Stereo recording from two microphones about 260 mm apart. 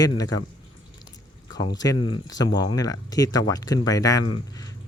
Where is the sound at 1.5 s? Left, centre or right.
Centre.